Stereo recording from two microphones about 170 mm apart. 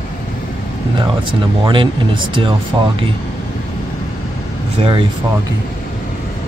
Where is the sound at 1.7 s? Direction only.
30° right (ahead or behind).